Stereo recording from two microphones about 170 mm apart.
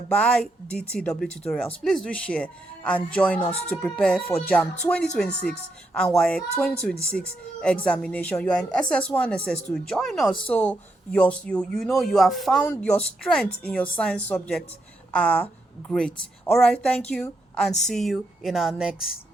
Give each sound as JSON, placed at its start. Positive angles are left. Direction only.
{"t": 0.1, "sound": "speech", "side_deg": 5}
{"t": 3.4, "sound": "speech", "side_deg": 35}
{"t": 3.7, "sound": "speech", "side_deg": 5}